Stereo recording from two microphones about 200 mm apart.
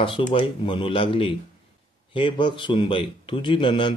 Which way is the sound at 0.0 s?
25° left (ahead or behind).